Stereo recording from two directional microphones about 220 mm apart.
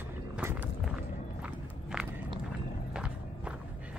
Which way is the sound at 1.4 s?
5° right (ahead or behind).